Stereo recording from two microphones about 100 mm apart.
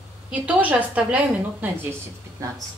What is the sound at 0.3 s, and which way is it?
Speech, 15° right (ahead or behind).